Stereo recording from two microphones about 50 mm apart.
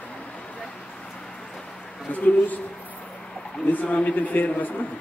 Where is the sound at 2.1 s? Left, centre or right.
Left.